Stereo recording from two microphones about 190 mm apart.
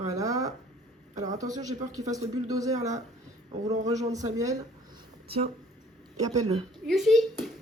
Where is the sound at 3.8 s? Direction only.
20° right (ahead or behind).